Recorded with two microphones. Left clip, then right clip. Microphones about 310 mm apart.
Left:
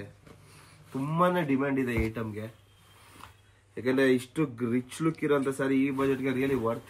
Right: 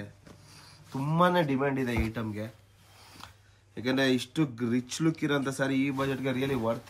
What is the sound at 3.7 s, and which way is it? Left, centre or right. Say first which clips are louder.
Speech: left 2 dB; right.